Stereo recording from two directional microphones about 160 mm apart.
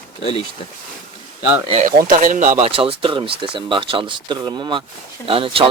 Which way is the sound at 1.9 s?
60° right (ahead or behind).